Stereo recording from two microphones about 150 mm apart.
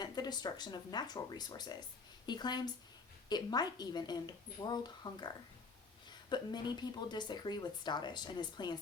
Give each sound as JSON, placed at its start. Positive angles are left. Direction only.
{"t": 0.0, "sound": "a woman's voice", "side_deg": 30}